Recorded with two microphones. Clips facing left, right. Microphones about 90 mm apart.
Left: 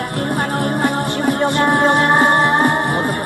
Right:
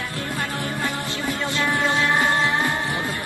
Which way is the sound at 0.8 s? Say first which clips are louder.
Left 9 dB; 60° left (ahead or behind).